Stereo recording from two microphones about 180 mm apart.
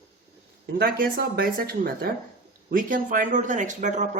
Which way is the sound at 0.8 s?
55° right (ahead or behind).